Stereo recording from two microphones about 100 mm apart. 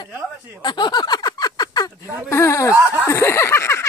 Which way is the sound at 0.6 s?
50° left (ahead or behind).